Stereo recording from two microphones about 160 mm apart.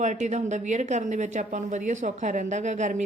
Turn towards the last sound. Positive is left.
turn(degrees=-50)  # may be behind; listen again after turning